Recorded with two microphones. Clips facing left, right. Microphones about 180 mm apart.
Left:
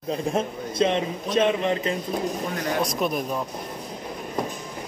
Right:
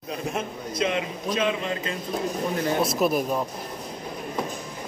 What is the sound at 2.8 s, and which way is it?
Speech, 5° right (ahead or behind).